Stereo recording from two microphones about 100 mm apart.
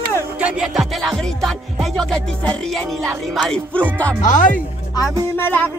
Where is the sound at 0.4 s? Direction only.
15° right (ahead or behind).